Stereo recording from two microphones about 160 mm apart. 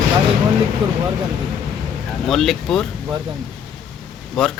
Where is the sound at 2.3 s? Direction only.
Centre (ahead or behind).